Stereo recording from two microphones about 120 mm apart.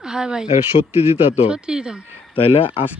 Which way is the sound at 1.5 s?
5° right (ahead or behind).